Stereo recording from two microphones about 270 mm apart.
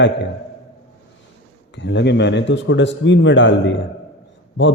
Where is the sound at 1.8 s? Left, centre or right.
Left.